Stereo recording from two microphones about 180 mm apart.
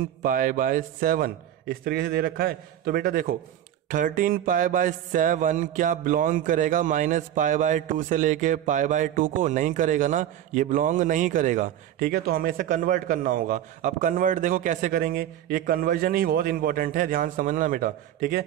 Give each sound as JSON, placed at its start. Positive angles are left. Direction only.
{"t": 0.0, "sound": "mantra", "side_deg": -50}